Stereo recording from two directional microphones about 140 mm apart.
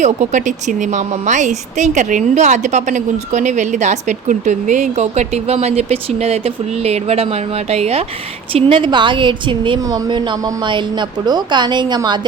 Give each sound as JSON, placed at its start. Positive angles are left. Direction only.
{"t": 0.0, "sound": "speech", "side_deg": -60}
{"t": 8.5, "sound": "a woman's voice", "side_deg": -40}